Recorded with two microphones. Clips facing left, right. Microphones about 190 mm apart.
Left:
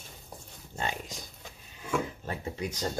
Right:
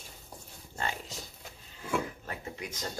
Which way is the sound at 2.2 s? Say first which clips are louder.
Left 5 dB; 30° left (ahead or behind).